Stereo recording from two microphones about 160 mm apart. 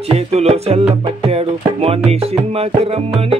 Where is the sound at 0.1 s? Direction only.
40° right (ahead or behind).